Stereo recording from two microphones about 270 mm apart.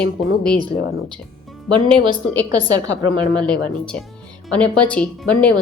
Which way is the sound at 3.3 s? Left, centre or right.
Centre.